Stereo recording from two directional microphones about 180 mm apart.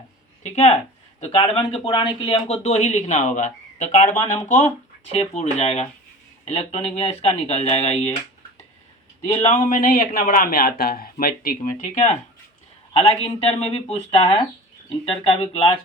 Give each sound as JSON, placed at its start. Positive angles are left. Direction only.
{"t": 0.4, "sound": "speech", "side_deg": 40}
{"t": 9.2, "sound": "speech", "side_deg": 35}
{"t": 9.6, "sound": "speech", "side_deg": 50}
{"t": 12.9, "sound": "a man's voice", "side_deg": 30}